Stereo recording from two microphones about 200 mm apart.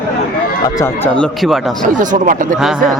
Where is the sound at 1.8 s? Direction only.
40° right (ahead or behind).